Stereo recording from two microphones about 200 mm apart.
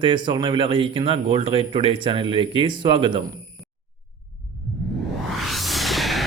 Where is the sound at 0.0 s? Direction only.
25° right (ahead or behind).